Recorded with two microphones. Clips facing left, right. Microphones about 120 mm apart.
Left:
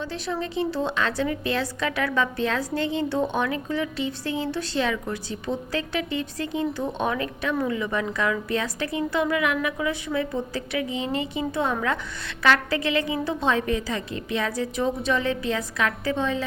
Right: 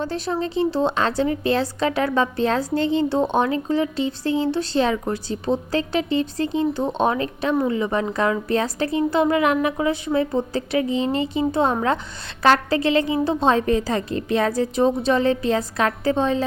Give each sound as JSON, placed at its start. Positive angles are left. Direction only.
{"t": 0.0, "sound": "speech", "side_deg": -40}